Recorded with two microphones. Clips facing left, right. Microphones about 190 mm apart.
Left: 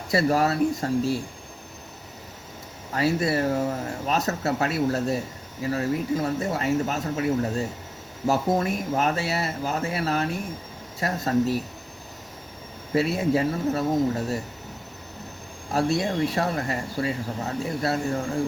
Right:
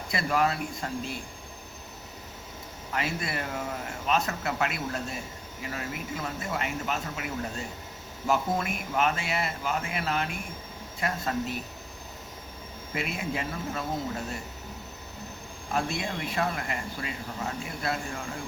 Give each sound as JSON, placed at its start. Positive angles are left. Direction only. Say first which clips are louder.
{"t": 0.1, "sound": "speech", "louder": "left 6 dB", "side_deg": 40}
{"t": 2.9, "sound": "speech", "louder": "left 9 dB", "side_deg": 35}
{"t": 12.9, "sound": "speech", "louder": "left 10 dB", "side_deg": 35}
{"t": 15.7, "sound": "speech", "louder": "left 7 dB", "side_deg": 40}